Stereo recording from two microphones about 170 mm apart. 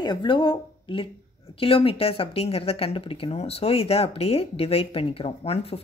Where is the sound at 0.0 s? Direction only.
25° left (ahead or behind).